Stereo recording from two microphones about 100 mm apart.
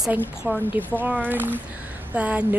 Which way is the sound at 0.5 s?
15° right (ahead or behind).